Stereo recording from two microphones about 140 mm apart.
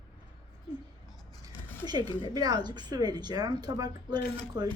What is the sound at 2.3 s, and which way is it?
A woman's voice, 30° right (ahead or behind).